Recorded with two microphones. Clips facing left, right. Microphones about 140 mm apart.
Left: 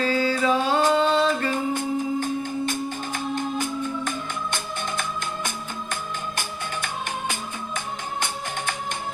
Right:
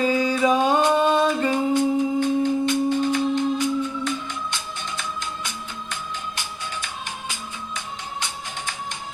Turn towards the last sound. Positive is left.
turn(degrees=55)  # may be behind; listen again after turning